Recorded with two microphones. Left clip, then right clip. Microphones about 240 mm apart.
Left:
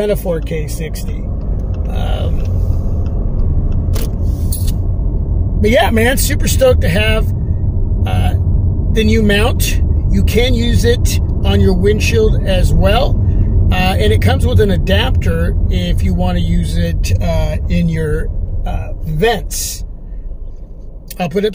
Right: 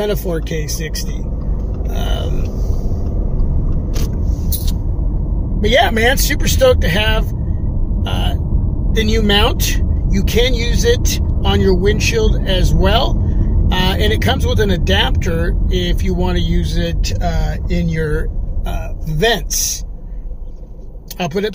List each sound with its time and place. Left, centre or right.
0.0 s speech: centre
2.0 s a sound: centre
5.6 s speech: centre
21.2 s speech: centre